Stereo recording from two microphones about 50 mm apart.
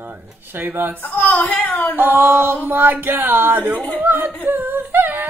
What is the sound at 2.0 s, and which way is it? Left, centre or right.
Speech, right.